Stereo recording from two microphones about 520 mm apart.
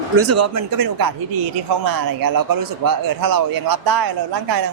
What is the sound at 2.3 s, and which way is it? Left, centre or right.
A man's voice, right.